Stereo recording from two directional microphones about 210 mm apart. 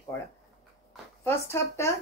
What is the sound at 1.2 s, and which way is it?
Speech, 10° left (ahead or behind).